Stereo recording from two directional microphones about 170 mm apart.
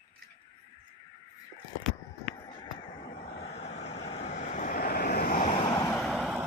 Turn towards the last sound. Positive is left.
turn(degrees=-5)  # may be behind; listen again after turning